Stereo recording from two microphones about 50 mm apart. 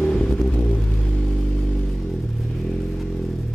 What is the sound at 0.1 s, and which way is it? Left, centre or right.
Vehicle, centre.